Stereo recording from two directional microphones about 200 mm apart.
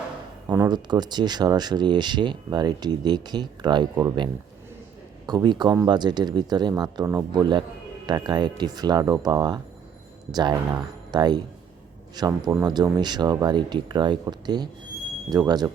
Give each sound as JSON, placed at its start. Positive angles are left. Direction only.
{"t": 0.4, "sound": "speech", "side_deg": -20}